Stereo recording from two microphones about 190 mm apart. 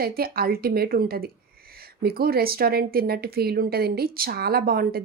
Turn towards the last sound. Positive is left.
turn(degrees=-55)  # may be behind; listen again after turning